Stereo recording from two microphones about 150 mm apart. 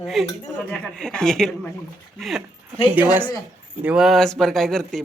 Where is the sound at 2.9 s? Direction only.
10° right (ahead or behind).